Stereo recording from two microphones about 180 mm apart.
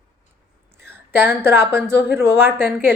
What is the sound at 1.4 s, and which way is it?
A woman's voice, 10° right (ahead or behind).